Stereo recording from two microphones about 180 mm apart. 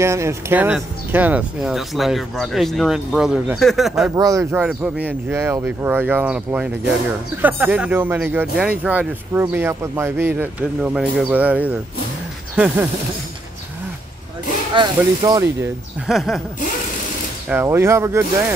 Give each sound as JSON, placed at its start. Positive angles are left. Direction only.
{"t": 0.0, "sound": "speech", "side_deg": -15}
{"t": 4.1, "sound": "speech", "side_deg": -20}
{"t": 12.5, "sound": "snake", "side_deg": -5}
{"t": 14.7, "sound": "speech", "side_deg": -25}
{"t": 16.1, "sound": "speech", "side_deg": 0}
{"t": 17.5, "sound": "speech", "side_deg": -15}